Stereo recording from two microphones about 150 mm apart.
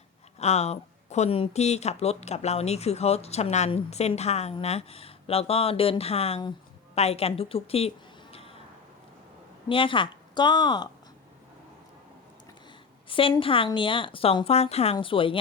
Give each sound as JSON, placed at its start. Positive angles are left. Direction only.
{"t": 0.3, "sound": "speech", "side_deg": 45}
{"t": 9.6, "sound": "a woman's voice", "side_deg": 35}
{"t": 13.1, "sound": "a woman's voice", "side_deg": 35}